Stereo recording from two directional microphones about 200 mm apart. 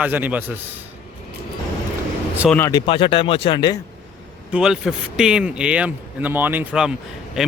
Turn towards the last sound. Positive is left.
turn(degrees=0)  # may be behind; listen again after turning